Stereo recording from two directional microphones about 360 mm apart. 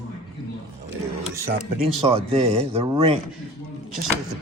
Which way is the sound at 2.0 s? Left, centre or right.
Centre.